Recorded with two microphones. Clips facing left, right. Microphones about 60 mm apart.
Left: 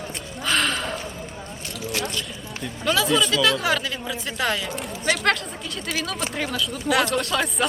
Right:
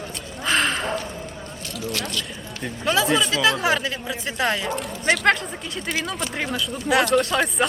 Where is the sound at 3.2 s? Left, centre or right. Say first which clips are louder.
Left 1 dB; right.